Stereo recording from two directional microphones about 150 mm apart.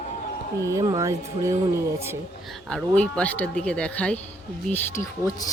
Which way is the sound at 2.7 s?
5° left (ahead or behind).